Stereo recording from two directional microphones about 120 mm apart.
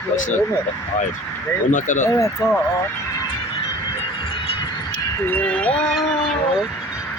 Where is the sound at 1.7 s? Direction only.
90° left.